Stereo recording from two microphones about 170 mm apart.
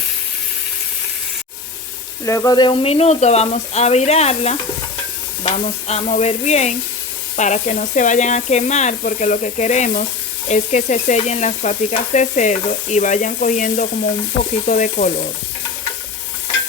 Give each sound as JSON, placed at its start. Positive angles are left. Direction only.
{"t": 2.2, "sound": "speech", "side_deg": 20}
{"t": 7.3, "sound": "frying", "side_deg": 45}